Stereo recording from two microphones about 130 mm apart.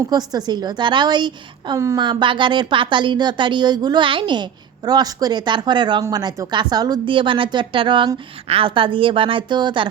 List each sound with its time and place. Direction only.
0.1 s speech: 30° right (ahead or behind)